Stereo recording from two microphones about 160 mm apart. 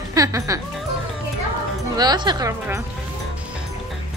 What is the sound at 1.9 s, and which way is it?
Speech, 25° right (ahead or behind).